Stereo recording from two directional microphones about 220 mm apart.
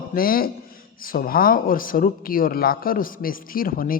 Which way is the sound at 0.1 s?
40° left (ahead or behind).